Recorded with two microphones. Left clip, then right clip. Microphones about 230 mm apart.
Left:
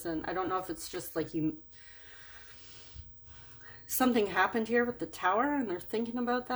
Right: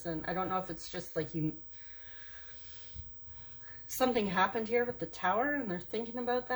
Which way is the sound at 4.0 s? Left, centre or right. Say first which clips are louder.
Left 2 dB; left.